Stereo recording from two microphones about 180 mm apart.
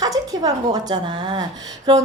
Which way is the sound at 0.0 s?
20° right (ahead or behind).